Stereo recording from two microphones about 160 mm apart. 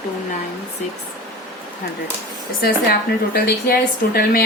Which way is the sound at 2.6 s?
75° left (ahead or behind).